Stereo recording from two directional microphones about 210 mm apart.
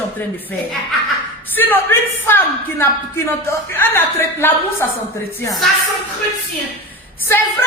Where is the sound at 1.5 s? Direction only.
10° left (ahead or behind).